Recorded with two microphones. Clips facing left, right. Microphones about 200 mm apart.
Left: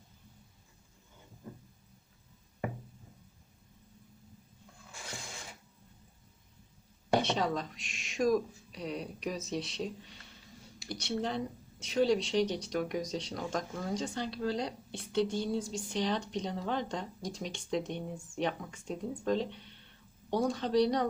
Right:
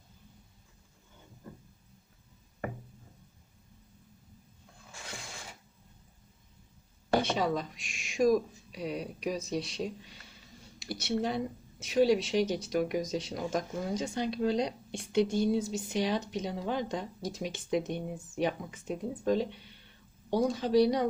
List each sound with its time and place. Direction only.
7.3 s speech: 5° right (ahead or behind)